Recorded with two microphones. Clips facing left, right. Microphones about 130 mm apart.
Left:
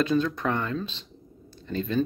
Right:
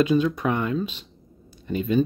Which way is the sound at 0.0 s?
10° right (ahead or behind).